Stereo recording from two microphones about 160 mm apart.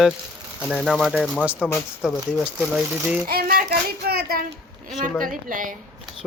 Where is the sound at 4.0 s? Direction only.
75° right (ahead or behind).